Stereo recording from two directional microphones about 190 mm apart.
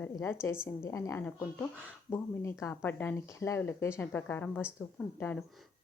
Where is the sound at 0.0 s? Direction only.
10° left (ahead or behind).